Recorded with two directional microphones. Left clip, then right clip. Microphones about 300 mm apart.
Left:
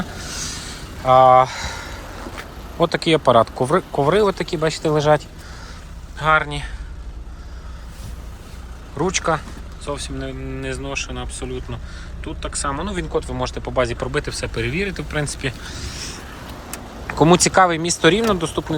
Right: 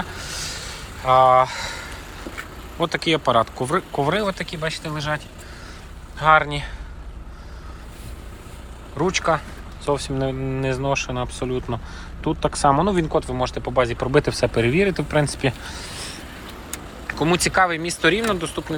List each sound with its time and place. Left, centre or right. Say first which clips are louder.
0.2 s a sound: left 1 dB; centre
2.7 s speech: left 4 dB; centre
6.1 s speech: right 1 dB; centre
9.0 s speech: even; centre
17.1 s speech: left 6 dB; centre